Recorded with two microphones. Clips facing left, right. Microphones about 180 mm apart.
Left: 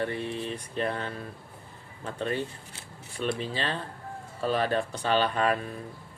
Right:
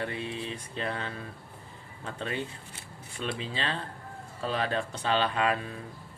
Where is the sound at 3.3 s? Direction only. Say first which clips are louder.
Left 2 dB; 50° left (ahead or behind).